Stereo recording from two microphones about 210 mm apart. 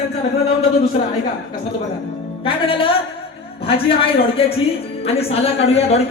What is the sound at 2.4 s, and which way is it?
A woman's voice, 25° left (ahead or behind).